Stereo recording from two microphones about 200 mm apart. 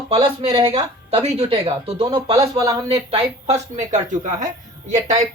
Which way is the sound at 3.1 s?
30° right (ahead or behind).